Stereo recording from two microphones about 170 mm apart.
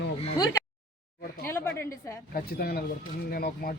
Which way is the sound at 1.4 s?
15° left (ahead or behind).